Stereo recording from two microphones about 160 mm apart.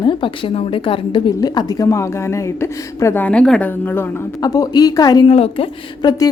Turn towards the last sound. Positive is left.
turn(degrees=35)  # may be behind; listen again after turning